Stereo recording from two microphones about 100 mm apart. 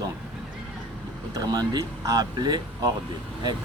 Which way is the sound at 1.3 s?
40° right (ahead or behind).